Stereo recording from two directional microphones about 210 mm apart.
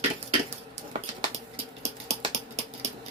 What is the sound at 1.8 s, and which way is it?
Typing, 30° right (ahead or behind).